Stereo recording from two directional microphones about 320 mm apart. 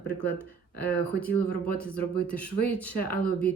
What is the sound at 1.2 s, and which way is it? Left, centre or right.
Speech, centre.